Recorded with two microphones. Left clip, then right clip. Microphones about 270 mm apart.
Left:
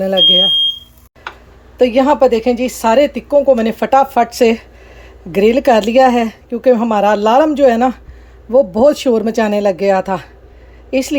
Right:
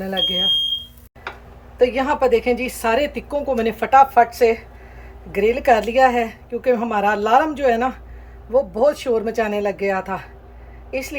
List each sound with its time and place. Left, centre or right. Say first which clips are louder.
0.0 s speech: left 10 dB; left
1.8 s a woman's voice: left 7 dB; left